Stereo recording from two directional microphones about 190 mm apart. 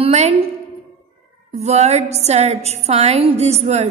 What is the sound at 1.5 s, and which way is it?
A woman's voice, 35° right (ahead or behind).